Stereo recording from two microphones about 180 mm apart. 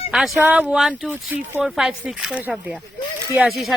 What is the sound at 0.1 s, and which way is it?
Speech, centre (ahead or behind).